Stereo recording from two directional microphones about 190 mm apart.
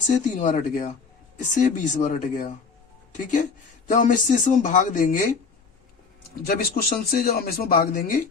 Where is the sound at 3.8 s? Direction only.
45° left (ahead or behind).